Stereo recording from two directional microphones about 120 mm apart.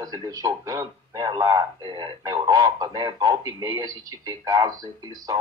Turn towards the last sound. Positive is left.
turn(degrees=-35)  # may be behind; listen again after turning